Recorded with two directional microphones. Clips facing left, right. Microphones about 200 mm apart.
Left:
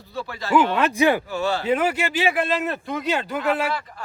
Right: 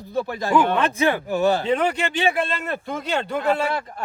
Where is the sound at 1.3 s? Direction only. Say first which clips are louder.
Right 4 dB; 15° right (ahead or behind).